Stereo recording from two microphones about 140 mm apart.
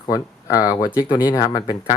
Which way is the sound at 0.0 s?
25° left (ahead or behind).